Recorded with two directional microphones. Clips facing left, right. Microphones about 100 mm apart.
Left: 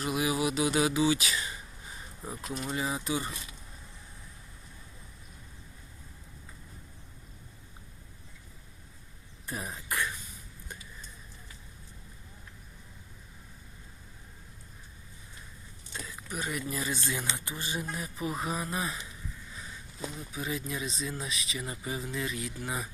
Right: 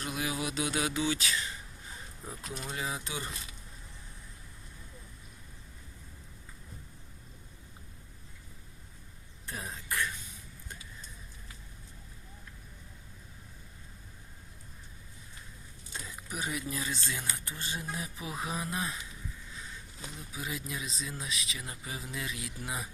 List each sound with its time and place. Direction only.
0.0 s speech: 5° left (ahead or behind)
9.5 s speech: 15° left (ahead or behind)
16.3 s speech: 5° right (ahead or behind)
16.9 s speech: 15° left (ahead or behind)
17.8 s speech: centre (ahead or behind)
20.3 s speech: centre (ahead or behind)